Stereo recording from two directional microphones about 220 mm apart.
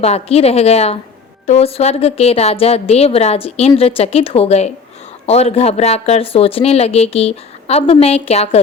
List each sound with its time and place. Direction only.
0.0 s speech: 30° left (ahead or behind)